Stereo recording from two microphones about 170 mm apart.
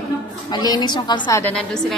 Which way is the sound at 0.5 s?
25° left (ahead or behind).